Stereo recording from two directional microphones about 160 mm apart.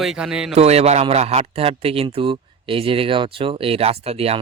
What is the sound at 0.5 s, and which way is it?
Speech, 40° right (ahead or behind).